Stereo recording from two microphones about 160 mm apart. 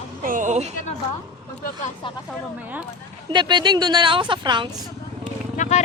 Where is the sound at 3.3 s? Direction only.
30° right (ahead or behind).